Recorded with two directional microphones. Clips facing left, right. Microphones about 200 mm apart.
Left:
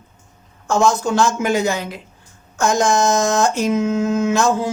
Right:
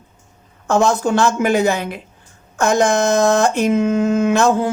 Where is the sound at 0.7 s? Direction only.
60° right (ahead or behind).